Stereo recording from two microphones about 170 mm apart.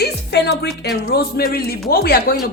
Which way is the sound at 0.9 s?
65° left (ahead or behind).